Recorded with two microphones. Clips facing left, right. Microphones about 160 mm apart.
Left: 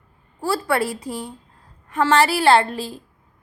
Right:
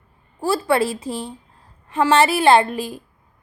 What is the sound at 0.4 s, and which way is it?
A woman's voice, 25° right (ahead or behind).